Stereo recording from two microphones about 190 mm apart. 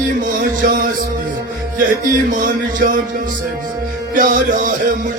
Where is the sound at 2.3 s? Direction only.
45° right (ahead or behind).